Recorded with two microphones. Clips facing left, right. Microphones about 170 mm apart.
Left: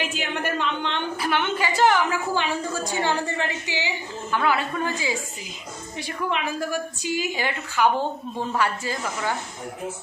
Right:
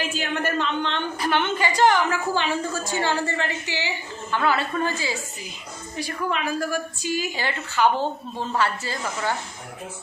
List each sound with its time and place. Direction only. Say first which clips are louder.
0.1 s a woman's voice: right 2 dB; 15° left (ahead or behind)